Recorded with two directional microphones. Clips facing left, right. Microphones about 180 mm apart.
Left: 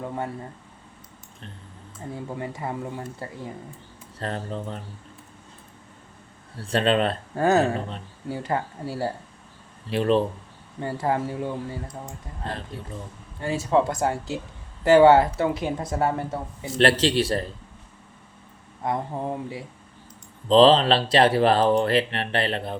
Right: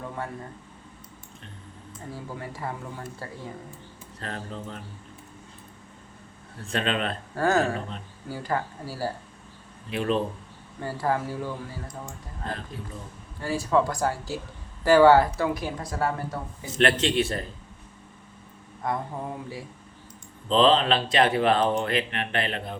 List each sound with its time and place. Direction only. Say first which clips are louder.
2.4 s speech: left 5 dB; 20° left (ahead or behind)
4.2 s speech: left 5 dB; 35° left (ahead or behind)
6.6 s speech: left 6 dB; 35° left (ahead or behind)
7.3 s speech: left 3 dB; 20° left (ahead or behind)
13.4 s speech: left 2 dB; 25° left (ahead or behind)
18.8 s speech: left 3 dB; 25° left (ahead or behind)
20.5 s speech: left 5 dB; 35° left (ahead or behind)